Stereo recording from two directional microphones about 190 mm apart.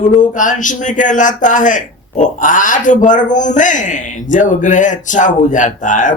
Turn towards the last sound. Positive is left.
turn(degrees=40)  # may be behind; listen again after turning